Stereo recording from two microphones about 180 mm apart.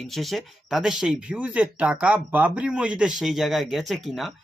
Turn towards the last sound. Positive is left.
turn(degrees=0)  # may be behind; listen again after turning